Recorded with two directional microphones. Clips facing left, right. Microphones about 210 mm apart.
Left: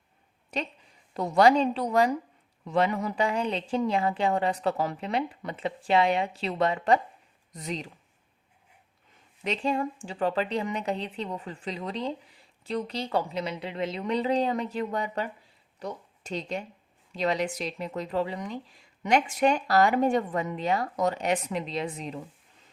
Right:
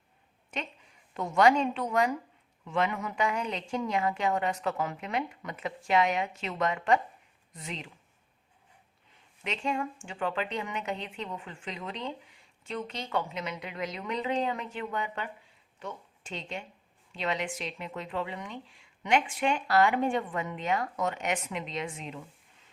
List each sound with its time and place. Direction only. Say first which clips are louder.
0.5 s a woman's voice: left 5 dB; 35° left (ahead or behind)
9.4 s a woman's voice: left 4 dB; 35° left (ahead or behind)